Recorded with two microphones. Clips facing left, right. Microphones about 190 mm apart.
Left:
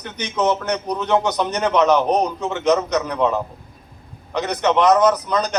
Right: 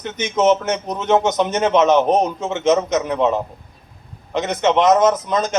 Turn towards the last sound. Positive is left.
turn(degrees=-25)  # may be behind; listen again after turning